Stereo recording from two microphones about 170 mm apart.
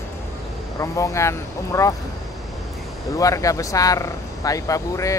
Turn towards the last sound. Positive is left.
turn(degrees=20)  # may be behind; listen again after turning